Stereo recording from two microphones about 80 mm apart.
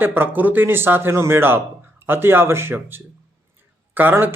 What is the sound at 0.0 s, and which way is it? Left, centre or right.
Speech, right.